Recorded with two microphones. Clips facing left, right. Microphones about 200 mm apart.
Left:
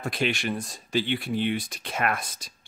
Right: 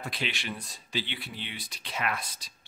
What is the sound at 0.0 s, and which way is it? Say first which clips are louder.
Speech: left 8 dB; 50° left (ahead or behind).